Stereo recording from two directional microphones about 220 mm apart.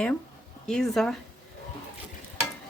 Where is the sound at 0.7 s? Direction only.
5° left (ahead or behind).